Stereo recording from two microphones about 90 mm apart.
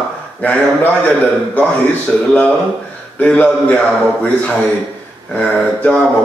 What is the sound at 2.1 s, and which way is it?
Speech, 5° left (ahead or behind).